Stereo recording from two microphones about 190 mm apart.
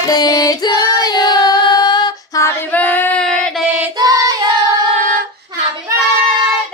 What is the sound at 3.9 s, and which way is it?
Child singing, 20° right (ahead or behind).